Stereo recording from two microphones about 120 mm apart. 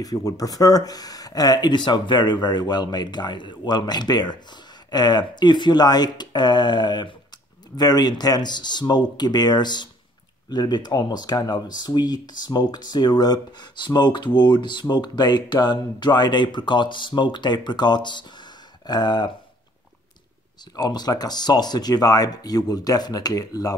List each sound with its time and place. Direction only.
0.0 s speech: 30° left (ahead or behind)
20.7 s speech: 35° left (ahead or behind)